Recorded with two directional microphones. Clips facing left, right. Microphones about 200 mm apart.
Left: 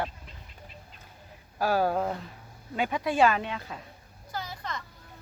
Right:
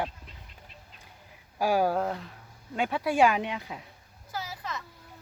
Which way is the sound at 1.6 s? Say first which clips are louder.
Right 1 dB; 10° right (ahead or behind).